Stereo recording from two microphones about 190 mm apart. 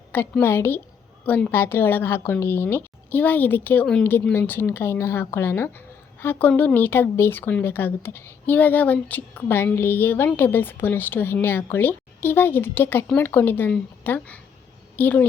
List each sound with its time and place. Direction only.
0.1 s speech: 10° left (ahead or behind)